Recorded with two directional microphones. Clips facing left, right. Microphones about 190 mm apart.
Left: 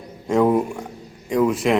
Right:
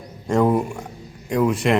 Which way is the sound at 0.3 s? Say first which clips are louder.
Left 1 dB; centre (ahead or behind).